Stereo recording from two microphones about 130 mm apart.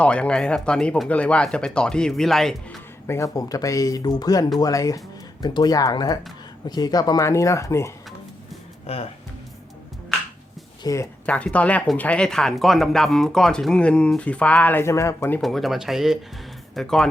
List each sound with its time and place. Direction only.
0.0 s speech: 10° left (ahead or behind)
3.1 s speech: 25° left (ahead or behind)
8.9 s speech: 50° left (ahead or behind)
10.8 s speech: 25° left (ahead or behind)
11.3 s speech: 10° left (ahead or behind)
15.4 s speech: centre (ahead or behind)